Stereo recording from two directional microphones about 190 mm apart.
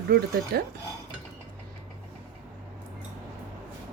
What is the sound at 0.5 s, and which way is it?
Speech, 60° right (ahead or behind).